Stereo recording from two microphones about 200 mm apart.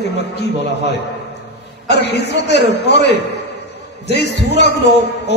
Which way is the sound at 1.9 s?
60° left (ahead or behind).